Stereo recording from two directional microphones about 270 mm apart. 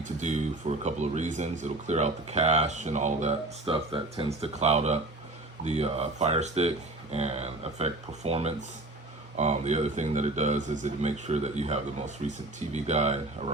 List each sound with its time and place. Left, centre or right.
0.0 s speech: right